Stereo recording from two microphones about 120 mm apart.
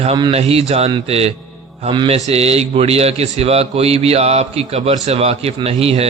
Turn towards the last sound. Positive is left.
turn(degrees=-55)  # may be behind; listen again after turning